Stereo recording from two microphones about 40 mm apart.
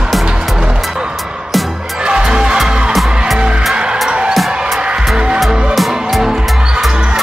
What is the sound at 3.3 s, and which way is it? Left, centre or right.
Music, right.